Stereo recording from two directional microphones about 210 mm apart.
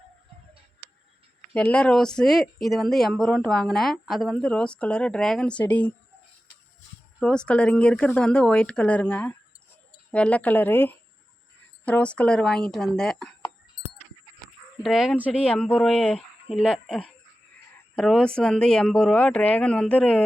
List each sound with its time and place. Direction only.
1.5 s speech: 5° left (ahead or behind)
7.2 s speech: 5° left (ahead or behind)
14.4 s speech: centre (ahead or behind)